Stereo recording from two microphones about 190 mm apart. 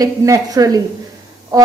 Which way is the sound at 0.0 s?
20° right (ahead or behind).